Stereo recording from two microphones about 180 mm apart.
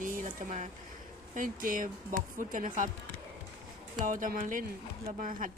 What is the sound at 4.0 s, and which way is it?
A woman's voice, 45° right (ahead or behind).